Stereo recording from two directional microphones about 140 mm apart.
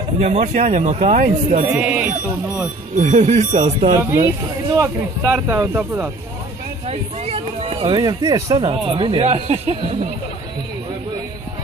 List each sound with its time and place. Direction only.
0.2 s speech: 55° right (ahead or behind)
1.1 s speech: 75° right (ahead or behind)
1.7 s speech: 10° right (ahead or behind)
3.0 s speech: 55° right (ahead or behind)
4.0 s speech: 15° right (ahead or behind)
6.9 s speech: 45° right (ahead or behind)
7.8 s speech: 30° right (ahead or behind)
8.8 s speech: 40° right (ahead or behind)